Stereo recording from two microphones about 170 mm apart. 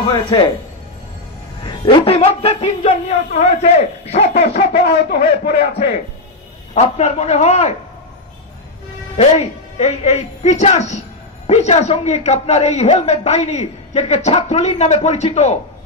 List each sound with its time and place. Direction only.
0.0 s speech: 30° left (ahead or behind)
1.6 s a woman's voice: 30° left (ahead or behind)
4.7 s a man's voice: 75° left (ahead or behind)
6.7 s a woman's voice: 40° left (ahead or behind)
9.1 s a woman's voice: 40° left (ahead or behind)